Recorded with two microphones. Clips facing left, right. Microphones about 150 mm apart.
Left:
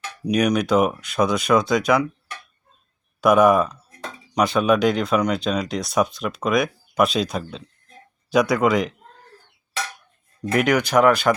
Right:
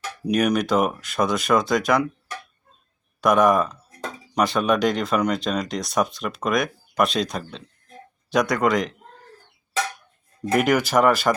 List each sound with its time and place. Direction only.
0.3 s speech: centre (ahead or behind)
3.2 s speech: 5° left (ahead or behind)
10.5 s speech: centre (ahead or behind)